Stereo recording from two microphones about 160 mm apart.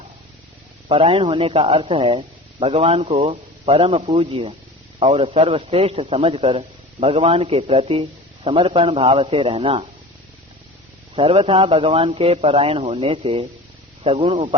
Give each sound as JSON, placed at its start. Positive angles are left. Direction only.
{"t": 0.9, "sound": "speech", "side_deg": -35}
{"t": 11.1, "sound": "speech", "side_deg": -35}